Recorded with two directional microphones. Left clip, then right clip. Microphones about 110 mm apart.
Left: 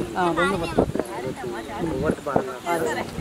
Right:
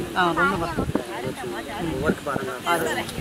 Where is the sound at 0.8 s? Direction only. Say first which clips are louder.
Left 7 dB; 90° left.